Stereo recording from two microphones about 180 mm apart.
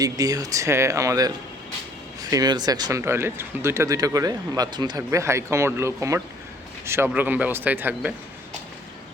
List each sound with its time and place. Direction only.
0.0 s speech: 20° right (ahead or behind)
2.3 s speech: 20° right (ahead or behind)